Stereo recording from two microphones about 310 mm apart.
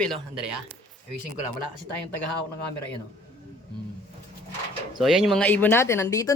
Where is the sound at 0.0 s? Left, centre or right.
Centre.